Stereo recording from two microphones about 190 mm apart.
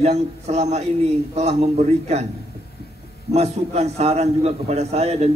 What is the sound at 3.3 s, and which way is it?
A man's voice, 35° right (ahead or behind).